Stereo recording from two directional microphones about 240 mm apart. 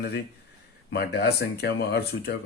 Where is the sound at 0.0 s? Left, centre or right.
Left.